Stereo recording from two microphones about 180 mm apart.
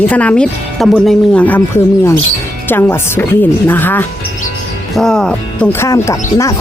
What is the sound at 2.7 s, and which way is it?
Speech, 10° left (ahead or behind).